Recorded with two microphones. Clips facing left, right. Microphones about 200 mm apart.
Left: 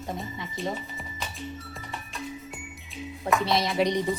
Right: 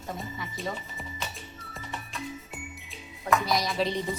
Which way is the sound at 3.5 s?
25° left (ahead or behind).